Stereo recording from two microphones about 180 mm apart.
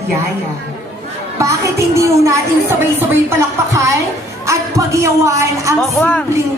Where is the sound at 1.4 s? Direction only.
15° right (ahead or behind).